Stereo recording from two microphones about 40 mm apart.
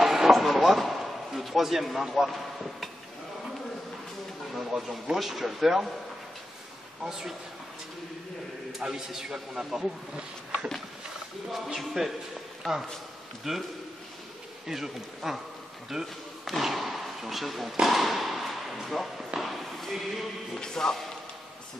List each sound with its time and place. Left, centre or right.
0.0 s a sound: centre
4.6 s a man's voice: centre
7.0 s a man's voice: centre
8.7 s a man's voice: centre
11.5 s speech: centre
12.6 s speech: centre
13.4 s a man's voice: centre
14.7 s a man's voice: centre
16.4 s a sound: centre
20.5 s speech: centre